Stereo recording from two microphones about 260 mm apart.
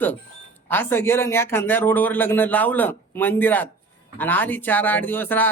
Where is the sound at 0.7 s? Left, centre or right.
Centre.